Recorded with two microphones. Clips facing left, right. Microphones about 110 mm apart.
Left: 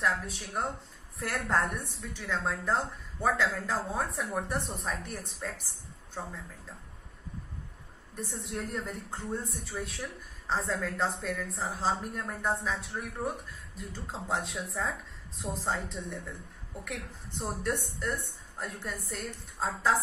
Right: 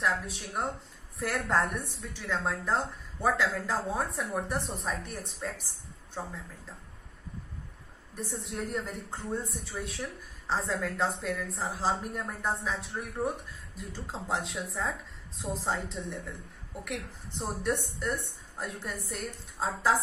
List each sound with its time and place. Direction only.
0.0 s a woman's voice: centre (ahead or behind)
8.2 s a woman's voice: centre (ahead or behind)